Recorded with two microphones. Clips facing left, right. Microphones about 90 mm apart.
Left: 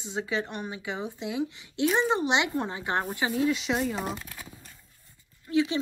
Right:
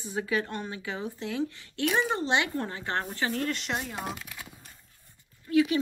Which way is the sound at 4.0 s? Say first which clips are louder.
Left 2 dB; 40° left (ahead or behind).